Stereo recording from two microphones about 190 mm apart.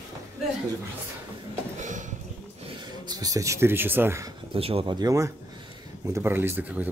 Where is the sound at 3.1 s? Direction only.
20° right (ahead or behind).